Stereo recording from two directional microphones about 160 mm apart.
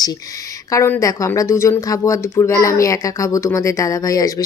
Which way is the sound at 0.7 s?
15° left (ahead or behind).